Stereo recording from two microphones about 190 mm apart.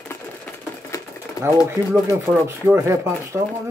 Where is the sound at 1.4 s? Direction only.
20° left (ahead or behind).